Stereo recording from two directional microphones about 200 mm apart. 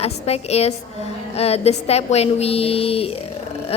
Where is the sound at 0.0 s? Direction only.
30° left (ahead or behind).